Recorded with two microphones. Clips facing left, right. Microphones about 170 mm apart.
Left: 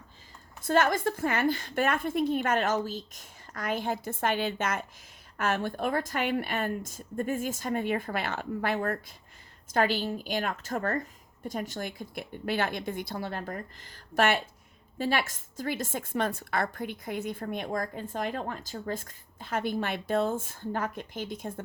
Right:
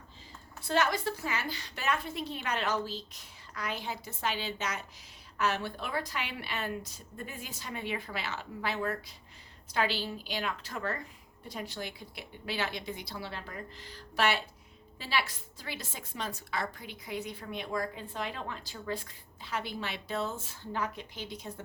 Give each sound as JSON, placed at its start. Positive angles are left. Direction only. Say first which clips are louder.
{"t": 0.6, "sound": "a woman's voice", "louder": "left 5 dB", "side_deg": 50}